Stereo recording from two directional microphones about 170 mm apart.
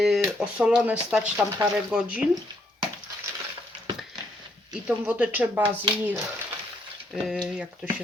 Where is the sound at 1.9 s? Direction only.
5° right (ahead or behind).